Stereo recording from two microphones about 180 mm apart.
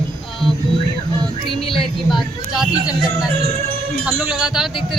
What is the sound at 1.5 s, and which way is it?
Speech, 30° left (ahead or behind).